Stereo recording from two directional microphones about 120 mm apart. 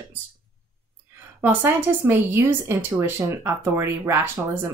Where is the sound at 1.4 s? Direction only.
15° right (ahead or behind).